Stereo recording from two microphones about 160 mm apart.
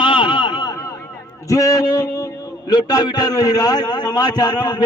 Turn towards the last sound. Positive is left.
turn(degrees=25)  # may be behind; listen again after turning